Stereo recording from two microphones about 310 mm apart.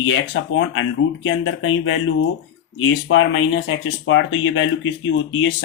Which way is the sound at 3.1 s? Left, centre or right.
Left.